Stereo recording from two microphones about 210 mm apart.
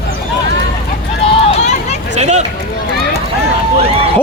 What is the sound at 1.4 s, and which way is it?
Vehicle, 35° left (ahead or behind).